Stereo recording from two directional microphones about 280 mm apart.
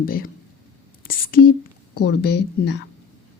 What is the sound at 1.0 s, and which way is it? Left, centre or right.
Whispering, left.